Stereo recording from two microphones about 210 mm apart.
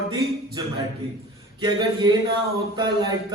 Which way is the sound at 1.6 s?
20° right (ahead or behind).